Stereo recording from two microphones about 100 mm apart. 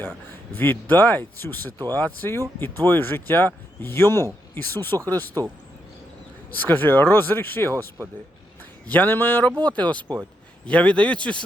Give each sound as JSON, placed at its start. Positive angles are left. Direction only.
{"t": 0.5, "sound": "speech", "side_deg": 20}
{"t": 6.5, "sound": "speech", "side_deg": 20}
{"t": 8.9, "sound": "speech", "side_deg": 15}